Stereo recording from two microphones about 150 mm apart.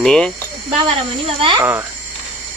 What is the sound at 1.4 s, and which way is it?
Speech, 35° right (ahead or behind).